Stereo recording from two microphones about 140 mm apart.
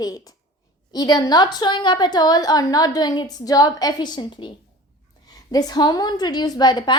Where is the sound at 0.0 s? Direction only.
25° left (ahead or behind).